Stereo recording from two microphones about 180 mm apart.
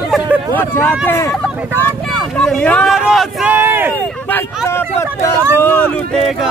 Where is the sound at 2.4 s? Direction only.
5° left (ahead or behind); by 3.9 s 10° right (ahead or behind).